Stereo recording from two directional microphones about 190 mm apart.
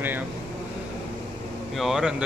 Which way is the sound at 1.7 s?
Centre (ahead or behind).